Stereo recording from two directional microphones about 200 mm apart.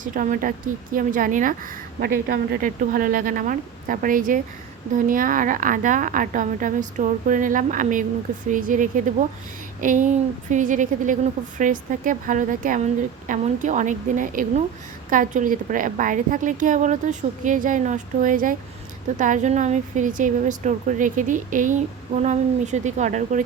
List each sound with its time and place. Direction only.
0.0 s a woman's voice: 40° right (ahead or behind)